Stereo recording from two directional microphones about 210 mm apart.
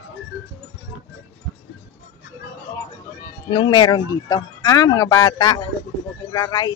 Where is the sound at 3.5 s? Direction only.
20° left (ahead or behind).